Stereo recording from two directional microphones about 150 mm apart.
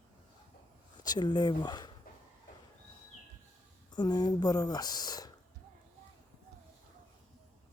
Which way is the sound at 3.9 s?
30° left (ahead or behind).